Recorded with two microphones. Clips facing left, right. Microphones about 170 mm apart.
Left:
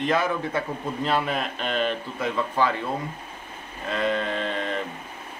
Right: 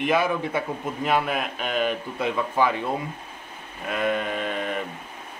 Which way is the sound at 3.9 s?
10° right (ahead or behind).